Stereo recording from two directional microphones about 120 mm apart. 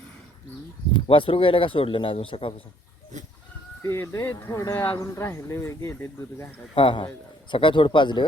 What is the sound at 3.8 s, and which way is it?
Speech, 20° left (ahead or behind).